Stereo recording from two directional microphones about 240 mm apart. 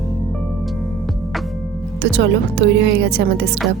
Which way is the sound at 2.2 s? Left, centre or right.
Right.